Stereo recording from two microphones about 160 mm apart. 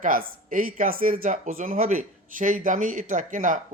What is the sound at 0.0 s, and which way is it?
Speech, 60° right (ahead or behind).